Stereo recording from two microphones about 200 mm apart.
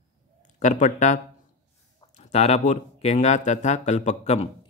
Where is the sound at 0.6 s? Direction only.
35° left (ahead or behind).